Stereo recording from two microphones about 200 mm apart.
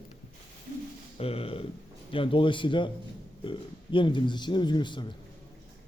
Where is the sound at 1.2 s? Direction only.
30° left (ahead or behind).